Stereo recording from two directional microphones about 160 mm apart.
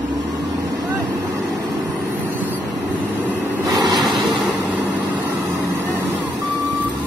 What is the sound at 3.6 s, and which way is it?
Vehicle, 25° right (ahead or behind).